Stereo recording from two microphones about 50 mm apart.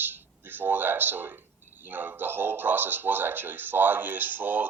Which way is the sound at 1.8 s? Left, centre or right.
Right.